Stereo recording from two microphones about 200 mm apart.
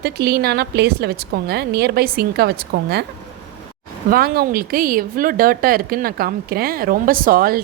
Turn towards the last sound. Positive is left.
turn(degrees=-45)  # may be behind; listen again after turning